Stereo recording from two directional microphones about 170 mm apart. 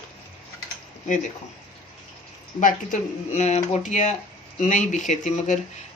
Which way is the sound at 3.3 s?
40° left (ahead or behind).